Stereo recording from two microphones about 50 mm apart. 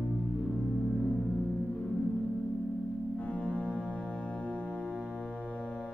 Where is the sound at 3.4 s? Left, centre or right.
Left.